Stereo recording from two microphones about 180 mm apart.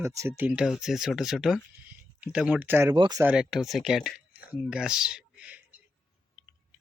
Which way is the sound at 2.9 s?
25° right (ahead or behind).